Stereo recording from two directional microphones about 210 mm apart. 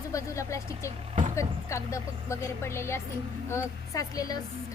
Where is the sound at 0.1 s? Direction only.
15° left (ahead or behind).